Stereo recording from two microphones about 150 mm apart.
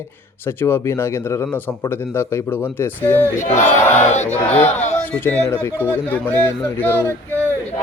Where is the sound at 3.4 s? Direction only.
55° left (ahead or behind).